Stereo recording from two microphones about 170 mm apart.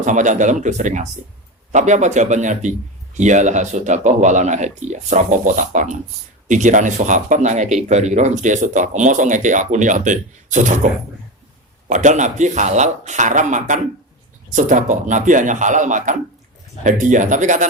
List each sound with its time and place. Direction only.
0.0 s speech: 45° right (ahead or behind)
11.9 s speech: 45° right (ahead or behind)